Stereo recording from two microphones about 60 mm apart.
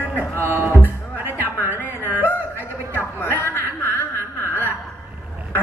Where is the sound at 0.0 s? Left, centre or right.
Right.